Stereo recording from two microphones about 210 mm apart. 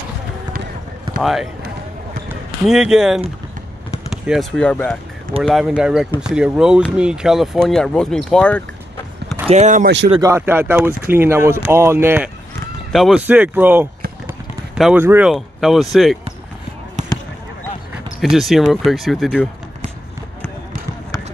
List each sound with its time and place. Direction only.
1.2 s speech: centre (ahead or behind)
2.2 s basketball bounce: 5° right (ahead or behind)
4.1 s speech: centre (ahead or behind)
9.5 s speech: 35° right (ahead or behind)
10.1 s speech: 15° right (ahead or behind)
18.2 s speech: centre (ahead or behind)